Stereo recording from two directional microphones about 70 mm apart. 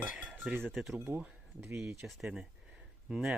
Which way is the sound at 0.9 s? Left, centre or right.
Right.